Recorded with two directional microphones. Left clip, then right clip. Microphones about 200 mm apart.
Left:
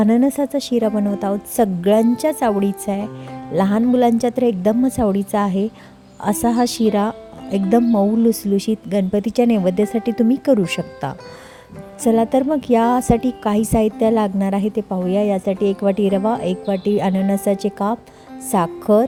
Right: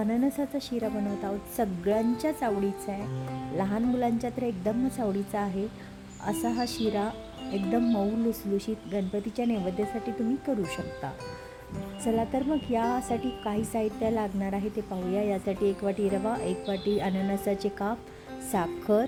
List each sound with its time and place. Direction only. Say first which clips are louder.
0.0 s a woman's voice: left 12 dB; 40° left (ahead or behind)
12.0 s a woman's voice: left 12 dB; 45° left (ahead or behind)